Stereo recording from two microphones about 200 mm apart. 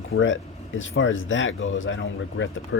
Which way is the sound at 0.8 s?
75° left (ahead or behind).